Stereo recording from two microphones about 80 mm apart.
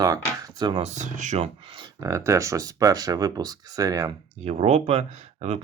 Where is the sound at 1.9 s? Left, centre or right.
Right.